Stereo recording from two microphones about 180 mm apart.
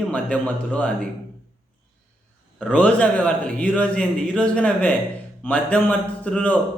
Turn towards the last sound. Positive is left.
turn(degrees=5)  # may be behind; listen again after turning